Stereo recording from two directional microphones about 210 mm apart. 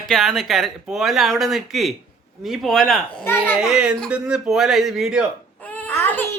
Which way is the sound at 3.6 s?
5° right (ahead or behind).